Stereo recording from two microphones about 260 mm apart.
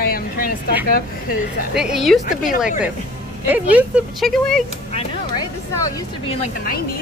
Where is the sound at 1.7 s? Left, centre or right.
Centre.